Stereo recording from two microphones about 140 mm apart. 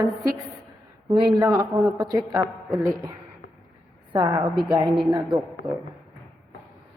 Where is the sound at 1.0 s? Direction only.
35° right (ahead or behind).